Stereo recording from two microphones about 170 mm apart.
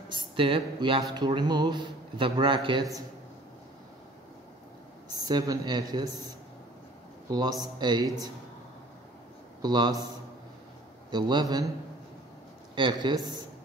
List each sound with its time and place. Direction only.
0.1 s speech: 30° right (ahead or behind)
5.1 s speech: 25° right (ahead or behind)
9.6 s speech: 25° right (ahead or behind)
11.1 s speech: 25° right (ahead or behind)
12.7 s speech: 30° right (ahead or behind)